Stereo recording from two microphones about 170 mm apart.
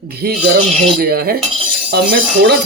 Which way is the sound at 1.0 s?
65° right (ahead or behind).